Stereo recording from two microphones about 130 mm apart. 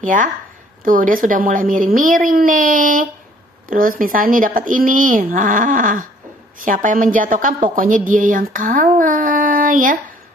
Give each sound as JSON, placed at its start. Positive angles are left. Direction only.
{"t": 0.0, "sound": "a woman's voice", "side_deg": -90}